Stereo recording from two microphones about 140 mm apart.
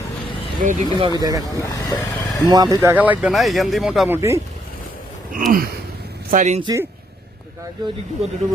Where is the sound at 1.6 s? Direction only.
20° left (ahead or behind).